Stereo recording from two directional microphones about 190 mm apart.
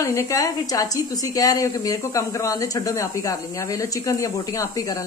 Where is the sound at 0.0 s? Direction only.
15° left (ahead or behind).